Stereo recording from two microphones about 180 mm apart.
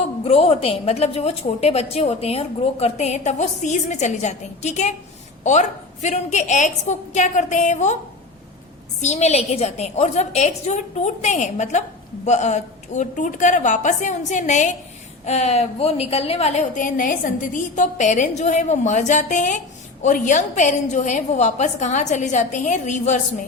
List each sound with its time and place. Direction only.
0.3 s a woman's voice: 35° left (ahead or behind)
9.0 s a woman's voice: 40° left (ahead or behind)